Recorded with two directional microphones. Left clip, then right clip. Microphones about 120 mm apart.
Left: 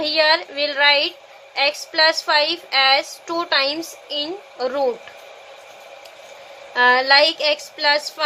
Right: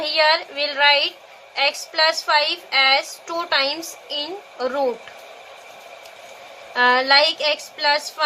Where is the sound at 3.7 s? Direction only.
25° left (ahead or behind).